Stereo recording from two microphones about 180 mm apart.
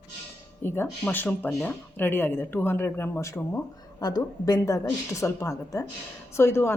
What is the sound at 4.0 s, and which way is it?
A woman's voice, 20° left (ahead or behind).